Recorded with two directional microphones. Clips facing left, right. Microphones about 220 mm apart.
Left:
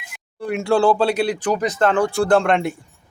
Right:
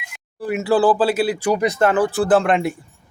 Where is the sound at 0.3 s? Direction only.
5° right (ahead or behind).